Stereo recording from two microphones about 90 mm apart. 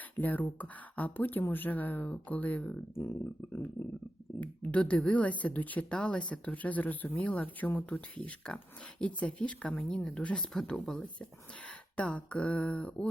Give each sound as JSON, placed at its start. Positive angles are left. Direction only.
{"t": 0.2, "sound": "speech", "side_deg": 20}
{"t": 4.4, "sound": "speech", "side_deg": 15}